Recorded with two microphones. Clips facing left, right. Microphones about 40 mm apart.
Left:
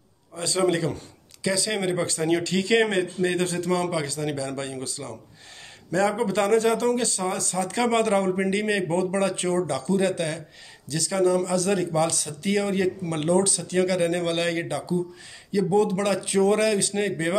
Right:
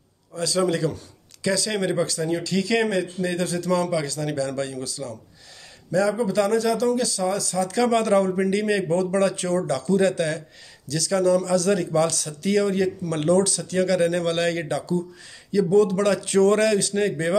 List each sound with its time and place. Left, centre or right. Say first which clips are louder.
0.4 s a man's voice: right 1 dB; left
1.4 s speech: right 2 dB; centre
2.5 s a man's voice: right 1 dB; left
5.9 s a man's voice: right 1 dB; left
9.7 s speech: right 3 dB; centre